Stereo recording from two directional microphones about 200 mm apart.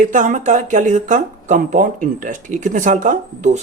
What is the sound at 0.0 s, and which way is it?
Speech, 40° right (ahead or behind).